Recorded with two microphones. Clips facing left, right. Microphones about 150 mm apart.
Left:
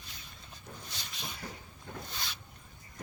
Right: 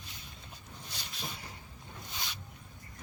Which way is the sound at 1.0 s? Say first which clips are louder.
Right 3 dB; centre (ahead or behind).